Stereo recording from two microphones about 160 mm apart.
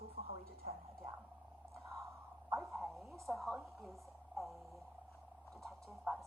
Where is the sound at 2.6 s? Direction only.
Centre (ahead or behind).